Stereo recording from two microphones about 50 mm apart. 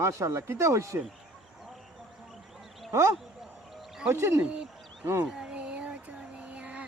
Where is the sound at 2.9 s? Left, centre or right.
Right.